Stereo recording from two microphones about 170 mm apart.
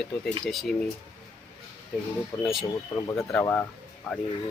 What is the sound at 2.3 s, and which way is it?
Speech, 20° left (ahead or behind).